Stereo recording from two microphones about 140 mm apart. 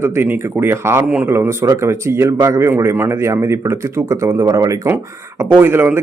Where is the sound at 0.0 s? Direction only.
15° right (ahead or behind).